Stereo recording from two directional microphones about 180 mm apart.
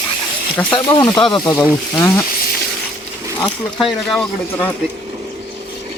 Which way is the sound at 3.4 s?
Centre (ahead or behind).